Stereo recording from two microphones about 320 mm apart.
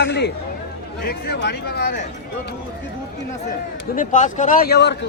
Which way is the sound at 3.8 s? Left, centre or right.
Left.